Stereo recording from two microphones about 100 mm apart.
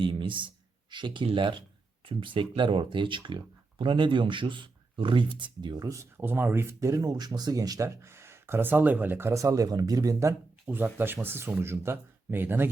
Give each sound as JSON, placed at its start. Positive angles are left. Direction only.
{"t": 0.0, "sound": "speech", "side_deg": -55}
{"t": 5.8, "sound": "speech", "side_deg": -30}
{"t": 6.2, "sound": "speech", "side_deg": -20}
{"t": 8.0, "sound": "speech", "side_deg": -25}
{"t": 10.7, "sound": "speech", "side_deg": -20}